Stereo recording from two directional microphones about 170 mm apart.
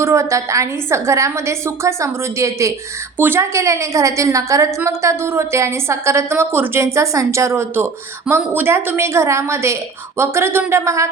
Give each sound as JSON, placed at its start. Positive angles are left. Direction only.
{"t": 0.0, "sound": "a woman's voice", "side_deg": -15}